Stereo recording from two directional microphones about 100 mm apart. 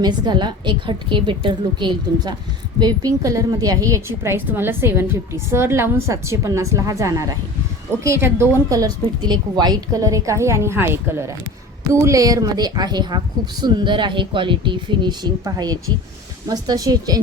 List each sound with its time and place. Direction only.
0.0 s a woman's voice: 45° right (ahead or behind)
2.8 s a woman's voice: 35° right (ahead or behind)
8.8 s a woman's voice: 45° right (ahead or behind)